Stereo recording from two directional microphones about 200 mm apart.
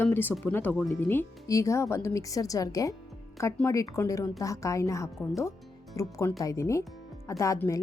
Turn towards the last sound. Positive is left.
turn(degrees=15)  # may be behind; listen again after turning